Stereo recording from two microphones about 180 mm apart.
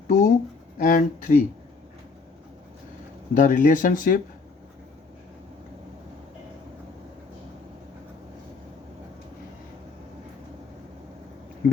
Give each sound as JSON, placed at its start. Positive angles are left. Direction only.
{"t": 0.1, "sound": "speech", "side_deg": 45}
{"t": 3.3, "sound": "speech", "side_deg": 45}
{"t": 11.6, "sound": "a sound", "side_deg": 50}